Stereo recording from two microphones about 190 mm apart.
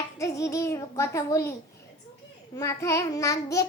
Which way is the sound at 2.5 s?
15° left (ahead or behind).